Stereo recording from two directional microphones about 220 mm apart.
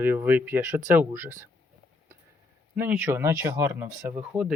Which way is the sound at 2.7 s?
10° right (ahead or behind).